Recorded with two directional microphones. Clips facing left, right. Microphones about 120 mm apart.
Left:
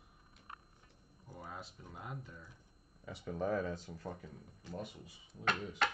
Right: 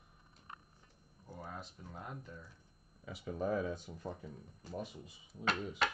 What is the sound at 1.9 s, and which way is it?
Speech, 5° left (ahead or behind).